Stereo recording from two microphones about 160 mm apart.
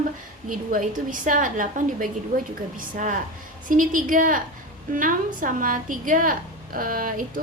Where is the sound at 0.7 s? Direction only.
55° right (ahead or behind).